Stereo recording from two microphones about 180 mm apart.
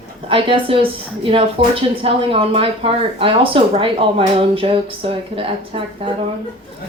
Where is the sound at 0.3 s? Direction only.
30° right (ahead or behind).